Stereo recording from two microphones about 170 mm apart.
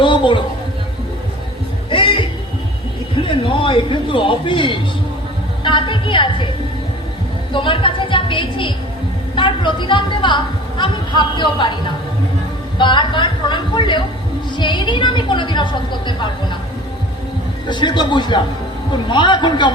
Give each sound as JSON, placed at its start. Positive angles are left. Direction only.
{"t": 0.0, "sound": "a sound", "side_deg": 30}
{"t": 1.9, "sound": "music", "side_deg": 30}
{"t": 3.2, "sound": "a man's voice", "side_deg": 30}
{"t": 7.5, "sound": "a woman's voice", "side_deg": 30}
{"t": 17.7, "sound": "a woman's voice", "side_deg": 25}